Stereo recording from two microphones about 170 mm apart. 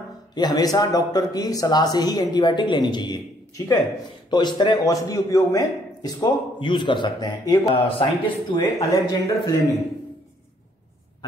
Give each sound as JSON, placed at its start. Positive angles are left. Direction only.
{"t": 0.3, "sound": "speech", "side_deg": 25}
{"t": 8.5, "sound": "speech", "side_deg": 20}